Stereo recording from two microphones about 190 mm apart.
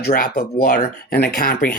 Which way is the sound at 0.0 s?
55° left (ahead or behind).